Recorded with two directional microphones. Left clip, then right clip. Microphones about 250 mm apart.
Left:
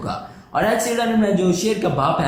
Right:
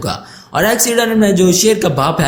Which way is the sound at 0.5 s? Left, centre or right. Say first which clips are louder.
Right 6 dB; right.